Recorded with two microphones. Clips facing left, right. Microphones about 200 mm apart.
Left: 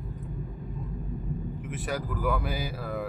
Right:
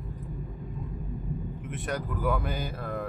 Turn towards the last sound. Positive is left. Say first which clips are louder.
# left 1 dB
turn(degrees=5)  # may be behind; listen again after turning